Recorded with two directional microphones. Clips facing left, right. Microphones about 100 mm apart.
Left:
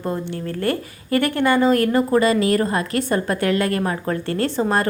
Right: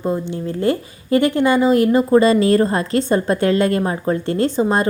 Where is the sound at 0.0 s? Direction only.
20° right (ahead or behind).